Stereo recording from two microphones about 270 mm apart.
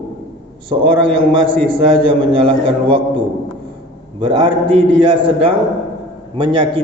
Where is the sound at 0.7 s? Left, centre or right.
Centre.